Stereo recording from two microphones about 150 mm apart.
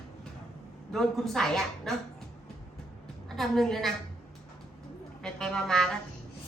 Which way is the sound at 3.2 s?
Centre (ahead or behind).